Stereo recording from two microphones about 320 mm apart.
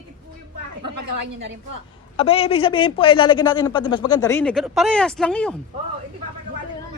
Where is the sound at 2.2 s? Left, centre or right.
Centre.